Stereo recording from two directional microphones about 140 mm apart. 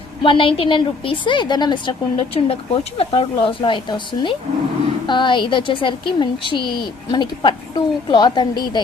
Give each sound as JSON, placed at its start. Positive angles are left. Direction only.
{"t": 0.2, "sound": "speech", "side_deg": 40}
{"t": 2.1, "sound": "speech", "side_deg": 45}